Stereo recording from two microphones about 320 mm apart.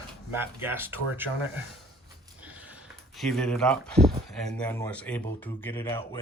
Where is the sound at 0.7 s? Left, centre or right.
Centre.